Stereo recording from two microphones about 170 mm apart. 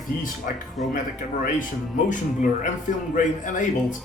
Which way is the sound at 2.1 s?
50° left (ahead or behind).